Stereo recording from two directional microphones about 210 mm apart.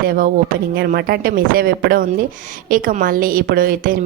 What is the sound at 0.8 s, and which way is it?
A woman's voice, 50° right (ahead or behind).